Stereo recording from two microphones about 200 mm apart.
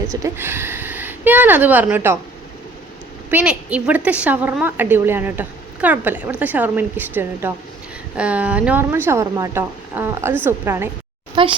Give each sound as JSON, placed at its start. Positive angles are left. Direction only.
{"t": 0.1, "sound": "speech", "side_deg": -15}
{"t": 3.2, "sound": "a woman's voice", "side_deg": -5}
{"t": 11.4, "sound": "a child's voice", "side_deg": -25}